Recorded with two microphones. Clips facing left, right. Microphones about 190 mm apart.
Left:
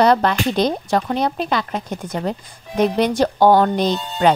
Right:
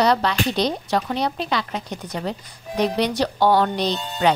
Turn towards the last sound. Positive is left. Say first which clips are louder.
# left 4 dB
turn(degrees=50)  # may be behind; listen again after turning